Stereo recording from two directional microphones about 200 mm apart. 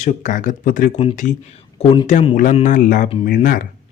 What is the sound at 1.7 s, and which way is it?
Speech, 25° left (ahead or behind).